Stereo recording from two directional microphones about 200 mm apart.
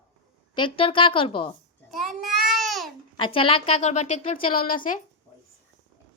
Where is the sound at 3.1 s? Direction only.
25° left (ahead or behind); by 4.8 s 45° left (ahead or behind).